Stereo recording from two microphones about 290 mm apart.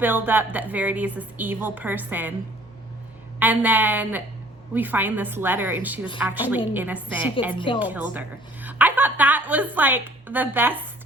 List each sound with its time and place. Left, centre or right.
0.0 s a woman's voice: centre
3.4 s a woman's voice: centre
7.5 s a woman's voice: centre
7.8 s a woman's voice: centre